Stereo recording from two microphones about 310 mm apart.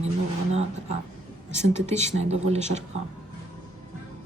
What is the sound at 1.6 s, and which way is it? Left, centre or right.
Speech, right.